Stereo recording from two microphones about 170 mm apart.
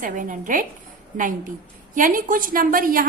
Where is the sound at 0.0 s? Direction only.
50° right (ahead or behind).